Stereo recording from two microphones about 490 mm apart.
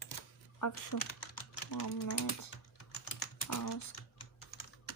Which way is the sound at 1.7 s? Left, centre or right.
Left.